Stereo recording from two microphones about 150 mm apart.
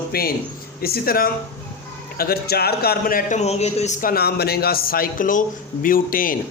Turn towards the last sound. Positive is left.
turn(degrees=70)  # may be behind; listen again after turning